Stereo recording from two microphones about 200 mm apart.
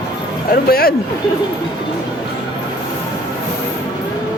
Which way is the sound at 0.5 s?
50° left (ahead or behind).